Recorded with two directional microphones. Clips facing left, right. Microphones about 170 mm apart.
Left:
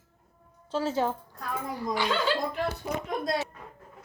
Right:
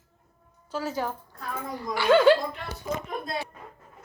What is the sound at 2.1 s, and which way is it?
Speech, 55° right (ahead or behind).